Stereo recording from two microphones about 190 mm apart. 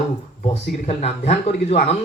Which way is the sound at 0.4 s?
35° left (ahead or behind).